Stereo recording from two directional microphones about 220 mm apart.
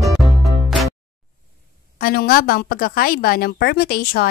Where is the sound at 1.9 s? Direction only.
45° left (ahead or behind).